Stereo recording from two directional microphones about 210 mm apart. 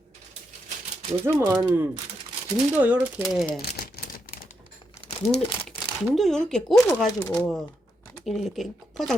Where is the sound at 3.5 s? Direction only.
45° left (ahead or behind).